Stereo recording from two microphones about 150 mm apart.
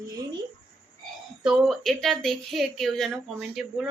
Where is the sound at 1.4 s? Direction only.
Centre (ahead or behind).